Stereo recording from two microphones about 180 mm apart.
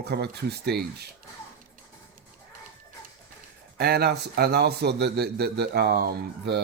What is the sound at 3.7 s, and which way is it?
A man's voice, 60° right (ahead or behind).